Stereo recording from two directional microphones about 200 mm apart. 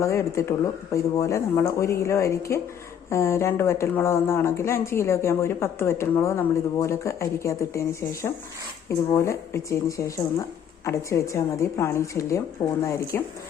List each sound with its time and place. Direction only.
0.0 s speech: 15° left (ahead or behind)